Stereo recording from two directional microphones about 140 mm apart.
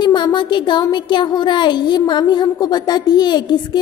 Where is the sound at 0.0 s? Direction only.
30° left (ahead or behind).